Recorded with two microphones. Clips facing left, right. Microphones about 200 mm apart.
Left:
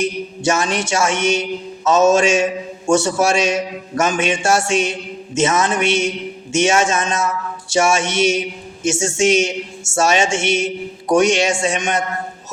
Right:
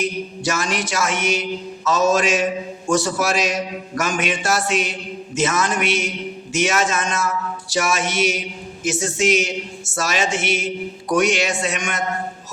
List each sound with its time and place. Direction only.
0.4 s a man's voice: 25° left (ahead or behind)